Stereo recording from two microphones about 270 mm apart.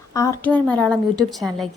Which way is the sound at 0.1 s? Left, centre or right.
Centre.